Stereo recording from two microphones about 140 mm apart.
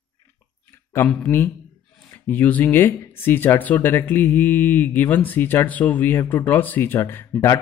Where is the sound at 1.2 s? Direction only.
15° left (ahead or behind).